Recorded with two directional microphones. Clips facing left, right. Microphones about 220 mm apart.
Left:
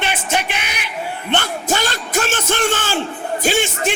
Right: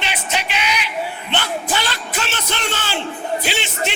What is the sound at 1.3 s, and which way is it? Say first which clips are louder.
Music: left 4 dB; 45° left (ahead or behind).